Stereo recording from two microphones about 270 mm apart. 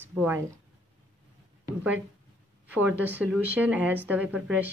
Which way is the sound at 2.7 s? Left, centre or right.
Centre.